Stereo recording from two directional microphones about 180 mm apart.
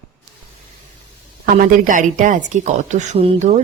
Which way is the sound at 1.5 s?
50° right (ahead or behind).